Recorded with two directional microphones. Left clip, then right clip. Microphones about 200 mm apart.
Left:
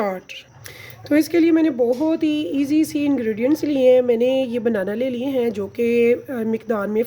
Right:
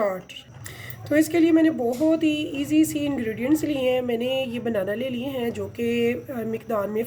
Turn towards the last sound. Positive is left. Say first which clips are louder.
# left 4 dB
turn(degrees=40)  # may be behind; listen again after turning